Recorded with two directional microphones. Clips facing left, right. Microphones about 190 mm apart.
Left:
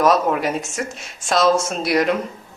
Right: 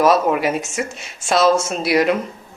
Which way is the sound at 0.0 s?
5° right (ahead or behind).